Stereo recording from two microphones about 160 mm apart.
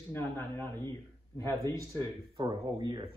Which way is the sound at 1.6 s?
25° right (ahead or behind).